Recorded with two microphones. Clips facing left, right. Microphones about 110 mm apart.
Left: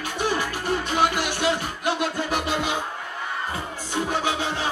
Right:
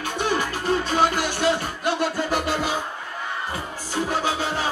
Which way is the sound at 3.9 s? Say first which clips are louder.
Right 1 dB; 20° left (ahead or behind).